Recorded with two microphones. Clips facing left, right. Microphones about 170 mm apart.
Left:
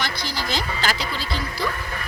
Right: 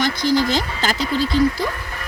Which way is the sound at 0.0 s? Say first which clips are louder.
Right 11 dB; 50° right (ahead or behind).